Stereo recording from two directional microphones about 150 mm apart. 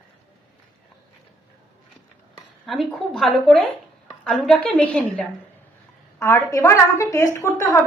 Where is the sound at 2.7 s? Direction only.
Centre (ahead or behind).